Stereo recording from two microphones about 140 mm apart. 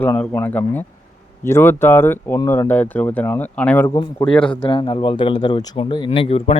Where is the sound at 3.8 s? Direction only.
20° left (ahead or behind).